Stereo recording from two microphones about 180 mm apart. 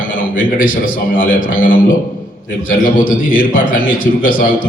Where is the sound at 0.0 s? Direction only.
50° left (ahead or behind).